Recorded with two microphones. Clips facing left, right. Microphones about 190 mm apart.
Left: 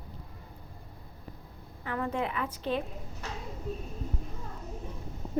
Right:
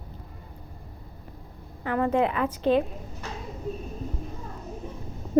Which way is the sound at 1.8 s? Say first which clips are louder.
Right 8 dB; 70° right (ahead or behind).